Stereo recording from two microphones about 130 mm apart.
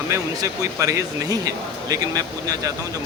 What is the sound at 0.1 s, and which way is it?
Speech, 25° right (ahead or behind).